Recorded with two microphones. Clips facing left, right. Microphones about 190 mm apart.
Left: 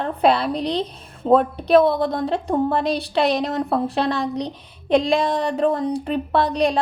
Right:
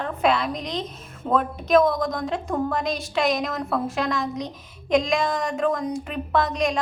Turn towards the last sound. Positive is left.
turn(degrees=35)  # may be behind; listen again after turning